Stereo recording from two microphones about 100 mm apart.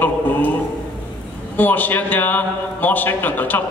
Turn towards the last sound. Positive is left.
turn(degrees=15)  # may be behind; listen again after turning